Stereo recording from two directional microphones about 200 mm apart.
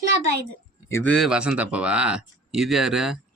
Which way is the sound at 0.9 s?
10° left (ahead or behind).